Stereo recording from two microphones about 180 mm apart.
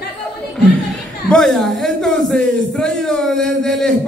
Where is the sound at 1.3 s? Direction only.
Centre (ahead or behind).